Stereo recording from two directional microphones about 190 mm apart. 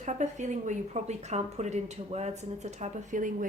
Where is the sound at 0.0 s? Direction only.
40° right (ahead or behind).